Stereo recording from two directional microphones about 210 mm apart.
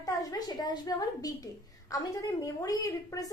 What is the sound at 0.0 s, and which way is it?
A woman's voice, 15° left (ahead or behind).